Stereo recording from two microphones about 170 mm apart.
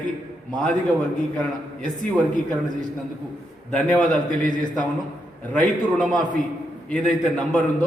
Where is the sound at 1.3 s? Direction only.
5° left (ahead or behind).